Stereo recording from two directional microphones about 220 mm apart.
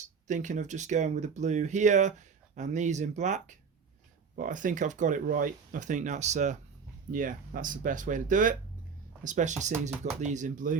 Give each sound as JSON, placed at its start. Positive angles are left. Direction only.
{"t": 0.0, "sound": "speech", "side_deg": -35}